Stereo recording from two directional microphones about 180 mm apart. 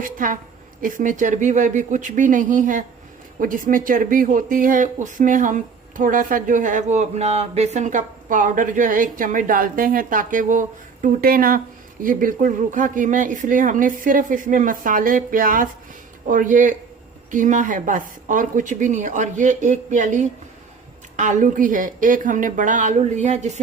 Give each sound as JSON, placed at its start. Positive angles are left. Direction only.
{"t": 0.0, "sound": "speech", "side_deg": -50}